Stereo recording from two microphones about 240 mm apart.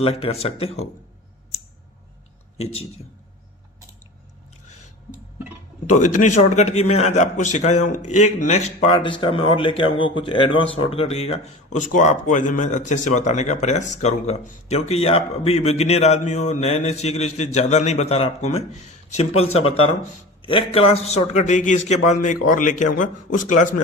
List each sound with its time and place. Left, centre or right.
0.0 s speech: left
6.1 s speech: left
10.5 s speech: left
10.8 s a man's voice: left